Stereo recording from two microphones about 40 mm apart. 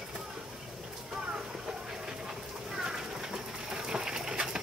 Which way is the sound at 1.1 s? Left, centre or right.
Centre.